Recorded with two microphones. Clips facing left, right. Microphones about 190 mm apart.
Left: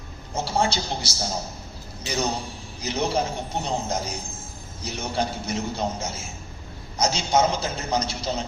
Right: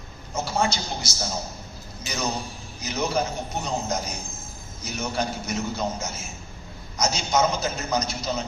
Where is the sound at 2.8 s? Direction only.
30° left (ahead or behind).